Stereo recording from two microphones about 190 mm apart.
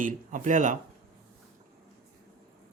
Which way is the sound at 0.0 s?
40° right (ahead or behind).